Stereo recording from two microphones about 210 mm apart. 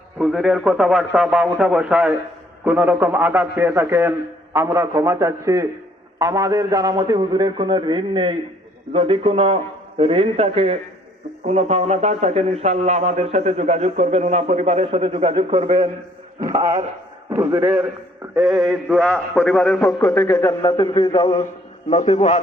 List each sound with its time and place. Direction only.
0.2 s a man's voice: centre (ahead or behind); by 22.4 s 35° left (ahead or behind)